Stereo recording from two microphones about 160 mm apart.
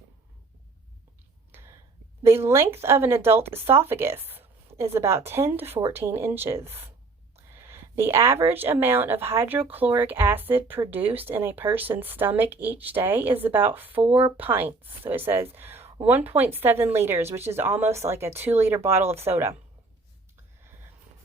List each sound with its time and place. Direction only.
2.2 s a woman's voice: 15° right (ahead or behind)
14.1 s speech: 35° right (ahead or behind)
14.3 s a woman's voice: 10° right (ahead or behind)